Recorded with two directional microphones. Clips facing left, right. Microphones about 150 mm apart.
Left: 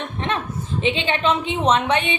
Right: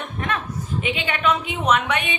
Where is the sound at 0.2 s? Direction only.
25° left (ahead or behind).